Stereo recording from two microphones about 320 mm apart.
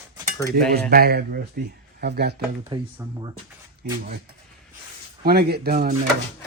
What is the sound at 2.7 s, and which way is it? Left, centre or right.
Speech, centre.